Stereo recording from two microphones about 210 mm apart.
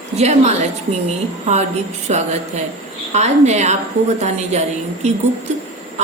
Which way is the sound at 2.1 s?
30° right (ahead or behind).